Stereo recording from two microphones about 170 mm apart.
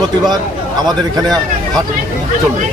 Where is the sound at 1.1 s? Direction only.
25° right (ahead or behind).